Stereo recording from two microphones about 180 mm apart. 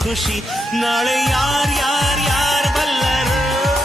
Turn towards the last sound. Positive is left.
turn(degrees=0)  # may be behind; listen again after turning